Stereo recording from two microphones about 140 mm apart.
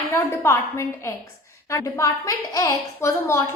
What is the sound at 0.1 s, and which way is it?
A woman's voice, 20° left (ahead or behind).